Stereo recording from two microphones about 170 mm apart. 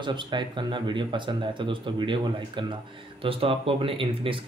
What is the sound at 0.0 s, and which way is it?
Speech, 30° right (ahead or behind).